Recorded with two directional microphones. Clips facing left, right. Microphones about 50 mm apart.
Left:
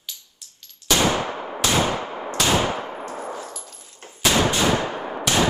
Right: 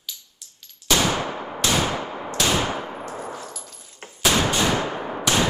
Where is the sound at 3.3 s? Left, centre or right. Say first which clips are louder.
Left 2 dB; left.